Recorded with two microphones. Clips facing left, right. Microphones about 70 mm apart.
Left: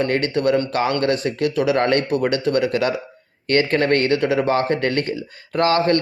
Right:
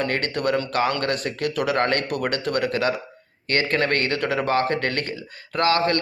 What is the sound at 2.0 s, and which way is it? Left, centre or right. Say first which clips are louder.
Speech: left 5 dB; left.